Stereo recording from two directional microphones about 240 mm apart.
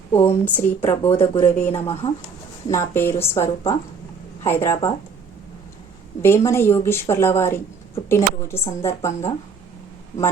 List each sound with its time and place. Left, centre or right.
0.1 s a woman's voice: centre
2.6 s a woman's voice: centre
6.2 s a woman's voice: centre